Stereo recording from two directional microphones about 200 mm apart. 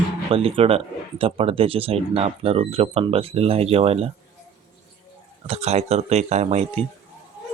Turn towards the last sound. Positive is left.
turn(degrees=-35)  # may be behind; listen again after turning